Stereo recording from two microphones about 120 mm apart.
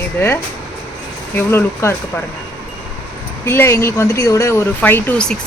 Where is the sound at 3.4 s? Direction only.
20° left (ahead or behind).